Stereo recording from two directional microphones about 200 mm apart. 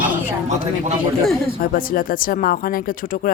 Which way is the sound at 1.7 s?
45° left (ahead or behind).